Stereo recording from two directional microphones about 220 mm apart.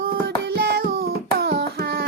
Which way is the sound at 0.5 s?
45° right (ahead or behind).